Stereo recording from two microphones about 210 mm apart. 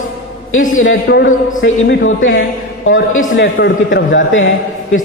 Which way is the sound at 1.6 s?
65° left (ahead or behind).